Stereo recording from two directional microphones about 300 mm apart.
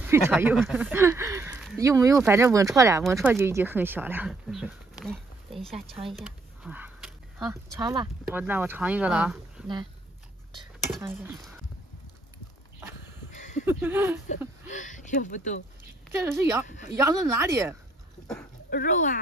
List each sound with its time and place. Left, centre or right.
0.0 s speech: centre
5.0 s a sound: centre
7.8 s speech: centre
10.9 s speech: centre
13.3 s a sound: left
13.7 s speech: centre
14.7 s speech: left
16.3 s speech: centre
18.7 s speech: left